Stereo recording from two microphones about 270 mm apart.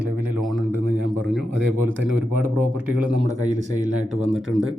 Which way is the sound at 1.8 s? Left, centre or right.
Right.